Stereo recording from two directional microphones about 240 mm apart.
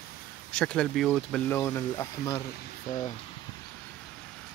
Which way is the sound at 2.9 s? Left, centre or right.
Left.